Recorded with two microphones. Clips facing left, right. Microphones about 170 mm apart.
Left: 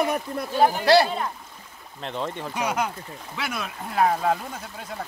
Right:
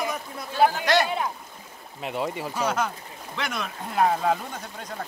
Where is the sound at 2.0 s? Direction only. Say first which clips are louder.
Right 1 dB; 10° right (ahead or behind).